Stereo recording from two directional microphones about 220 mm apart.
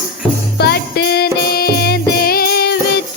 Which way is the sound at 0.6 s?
45° left (ahead or behind).